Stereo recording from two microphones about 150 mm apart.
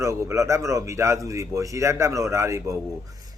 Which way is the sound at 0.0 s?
20° right (ahead or behind).